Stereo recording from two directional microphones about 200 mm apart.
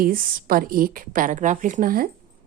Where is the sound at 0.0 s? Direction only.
45° right (ahead or behind).